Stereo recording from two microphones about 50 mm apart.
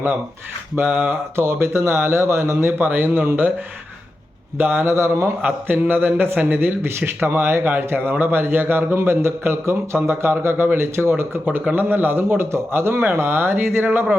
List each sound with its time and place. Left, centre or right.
0.8 s speech: right
4.5 s speech: right
4.9 s speech: right
5.6 s speech: right
11.7 s speech: right
13.1 s speech: right